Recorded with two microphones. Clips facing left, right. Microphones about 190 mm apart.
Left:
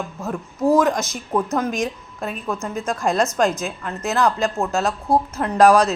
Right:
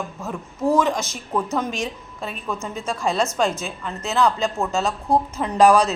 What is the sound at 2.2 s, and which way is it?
Speech, 5° left (ahead or behind).